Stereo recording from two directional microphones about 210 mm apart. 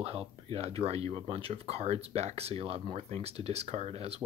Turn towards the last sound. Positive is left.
turn(degrees=-30)  # may be behind; listen again after turning